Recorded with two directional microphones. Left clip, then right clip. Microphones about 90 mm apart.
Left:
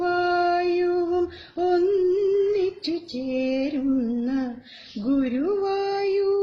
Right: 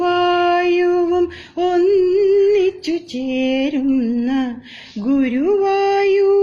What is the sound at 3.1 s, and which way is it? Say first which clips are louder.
Music: right 5 dB; 25° left (ahead or behind).